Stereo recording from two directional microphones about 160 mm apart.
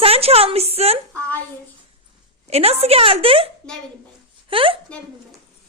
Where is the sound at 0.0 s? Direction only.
40° right (ahead or behind).